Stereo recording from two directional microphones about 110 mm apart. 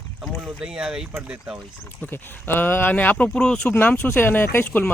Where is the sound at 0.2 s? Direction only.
5° right (ahead or behind).